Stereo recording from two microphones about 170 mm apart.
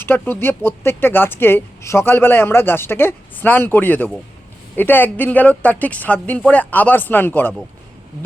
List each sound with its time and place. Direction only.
0.0 s speech: 10° left (ahead or behind)